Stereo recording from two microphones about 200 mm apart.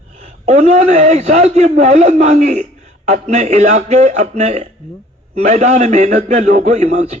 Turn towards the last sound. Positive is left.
turn(degrees=-35)  # may be behind; listen again after turning